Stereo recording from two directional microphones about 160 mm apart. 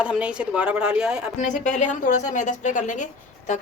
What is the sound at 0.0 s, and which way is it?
A woman's voice, 5° right (ahead or behind).